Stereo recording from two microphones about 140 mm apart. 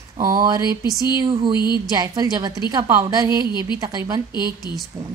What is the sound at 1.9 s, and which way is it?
A woman's voice, 30° right (ahead or behind).